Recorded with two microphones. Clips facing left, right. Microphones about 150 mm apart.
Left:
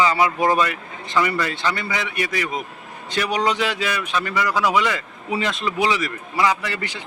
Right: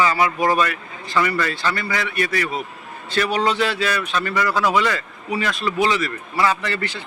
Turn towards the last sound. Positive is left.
turn(degrees=15)  # may be behind; listen again after turning